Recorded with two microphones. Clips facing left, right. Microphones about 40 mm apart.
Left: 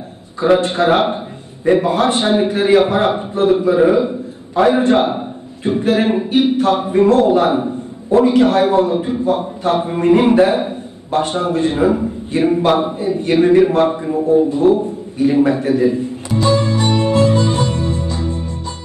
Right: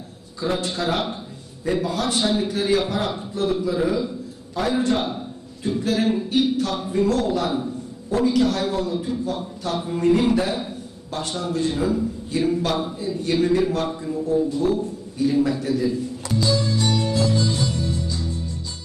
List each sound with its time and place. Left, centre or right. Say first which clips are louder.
0.4 s a man's voice: left 11 dB; left